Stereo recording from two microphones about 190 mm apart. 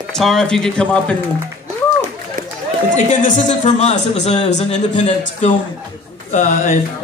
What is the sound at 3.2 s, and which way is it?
Speech, 40° left (ahead or behind).